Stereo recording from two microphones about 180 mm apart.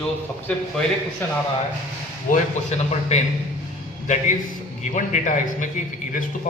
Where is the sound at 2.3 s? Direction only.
40° left (ahead or behind).